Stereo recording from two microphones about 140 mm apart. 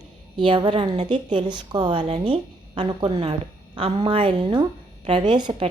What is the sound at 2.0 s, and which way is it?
Speech, 50° right (ahead or behind).